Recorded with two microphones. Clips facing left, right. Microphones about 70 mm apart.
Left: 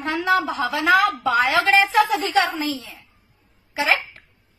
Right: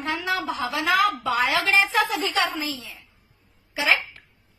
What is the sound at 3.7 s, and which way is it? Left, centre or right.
Hiccup, left.